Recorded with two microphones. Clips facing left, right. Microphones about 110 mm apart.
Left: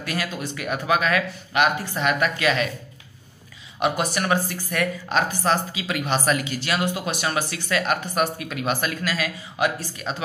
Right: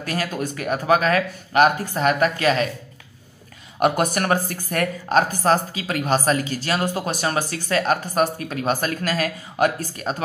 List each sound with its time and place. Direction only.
0.0 s a woman's voice: 40° right (ahead or behind)
3.8 s a woman's voice: 50° right (ahead or behind)